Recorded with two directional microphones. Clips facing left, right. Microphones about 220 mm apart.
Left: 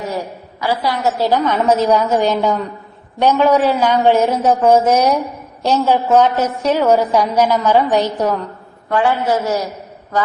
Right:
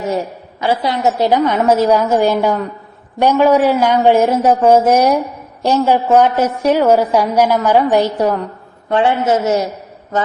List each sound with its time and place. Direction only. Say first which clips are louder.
0.6 s a woman's voice: right 2 dB; 25° right (ahead or behind)
8.9 s a man's voice: right 2 dB; 25° right (ahead or behind)